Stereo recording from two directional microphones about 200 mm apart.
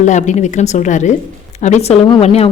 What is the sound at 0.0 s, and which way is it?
Speech, 35° left (ahead or behind).